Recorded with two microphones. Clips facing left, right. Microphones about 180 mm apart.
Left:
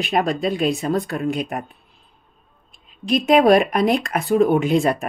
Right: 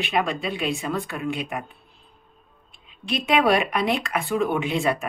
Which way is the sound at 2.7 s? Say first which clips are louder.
Left 8 dB; 45° left (ahead or behind).